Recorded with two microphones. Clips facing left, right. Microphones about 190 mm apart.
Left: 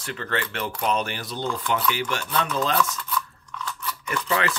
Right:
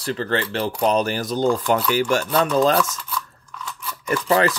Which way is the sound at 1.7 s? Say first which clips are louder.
Right 6 dB; 40° right (ahead or behind).